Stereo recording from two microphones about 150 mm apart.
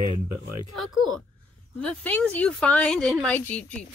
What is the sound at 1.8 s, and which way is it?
Speech, 10° left (ahead or behind).